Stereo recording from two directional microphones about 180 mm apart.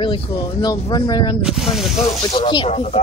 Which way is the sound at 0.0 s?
25° left (ahead or behind).